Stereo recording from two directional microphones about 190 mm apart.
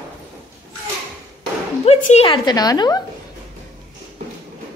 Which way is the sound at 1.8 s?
35° left (ahead or behind).